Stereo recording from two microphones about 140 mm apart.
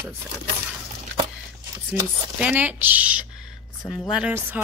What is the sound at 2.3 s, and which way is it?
A woman's voice, 10° right (ahead or behind).